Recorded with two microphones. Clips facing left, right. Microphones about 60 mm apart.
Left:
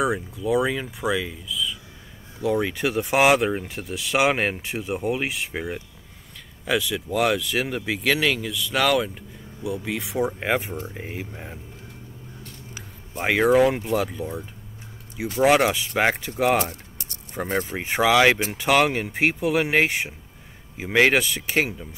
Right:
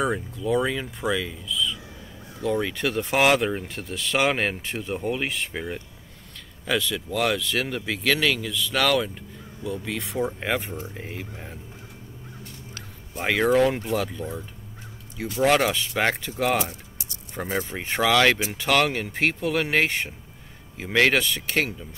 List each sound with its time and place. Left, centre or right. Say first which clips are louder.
0.0 s speech: left 2 dB; centre
13.2 s speech: left 2 dB; centre
15.1 s speech: left 2 dB; left
15.4 s speech: left 2 dB; centre
17.6 s speech: left 2 dB; centre